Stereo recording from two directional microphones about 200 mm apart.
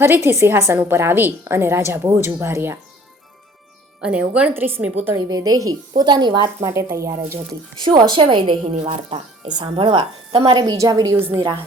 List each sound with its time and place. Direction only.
0.0 s a woman's voice: 10° right (ahead or behind)
4.0 s a woman's voice: 5° right (ahead or behind)